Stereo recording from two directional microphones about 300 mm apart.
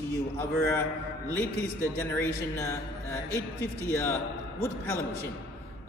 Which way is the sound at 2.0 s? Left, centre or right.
Centre.